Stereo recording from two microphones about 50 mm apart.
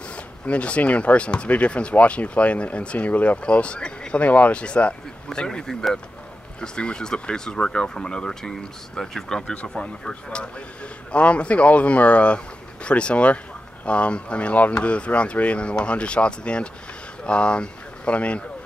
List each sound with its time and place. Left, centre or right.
0.1 s speech: left
11.1 s speech: left